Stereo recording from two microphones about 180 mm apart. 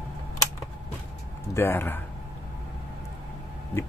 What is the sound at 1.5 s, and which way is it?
Speech, 10° left (ahead or behind).